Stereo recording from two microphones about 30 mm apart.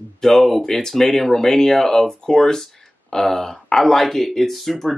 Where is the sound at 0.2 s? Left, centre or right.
Centre.